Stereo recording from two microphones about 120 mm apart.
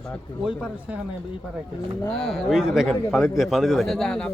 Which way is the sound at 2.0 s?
Centre (ahead or behind).